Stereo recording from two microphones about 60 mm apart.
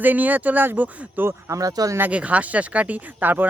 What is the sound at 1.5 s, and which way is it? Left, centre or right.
Speech, right.